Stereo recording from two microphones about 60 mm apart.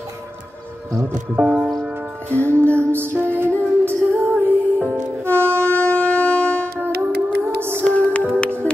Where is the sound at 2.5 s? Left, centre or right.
Right.